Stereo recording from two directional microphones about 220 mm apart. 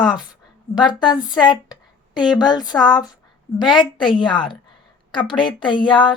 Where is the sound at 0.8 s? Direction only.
20° left (ahead or behind).